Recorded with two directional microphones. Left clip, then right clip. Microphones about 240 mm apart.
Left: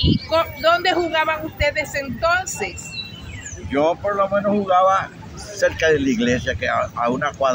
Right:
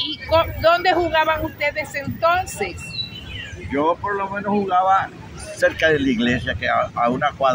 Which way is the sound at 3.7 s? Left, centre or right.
Centre.